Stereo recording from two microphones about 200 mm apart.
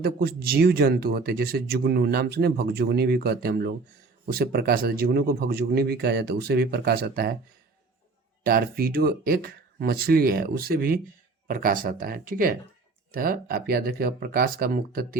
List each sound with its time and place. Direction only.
0.0 s speech: 50° right (ahead or behind)
8.4 s speech: 50° right (ahead or behind)